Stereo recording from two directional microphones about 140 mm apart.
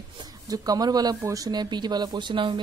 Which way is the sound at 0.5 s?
25° right (ahead or behind).